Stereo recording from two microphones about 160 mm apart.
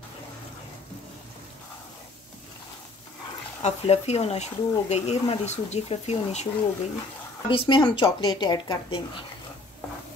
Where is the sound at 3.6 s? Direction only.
40° left (ahead or behind).